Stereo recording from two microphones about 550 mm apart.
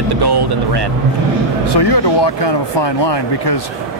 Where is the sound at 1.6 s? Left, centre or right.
Left.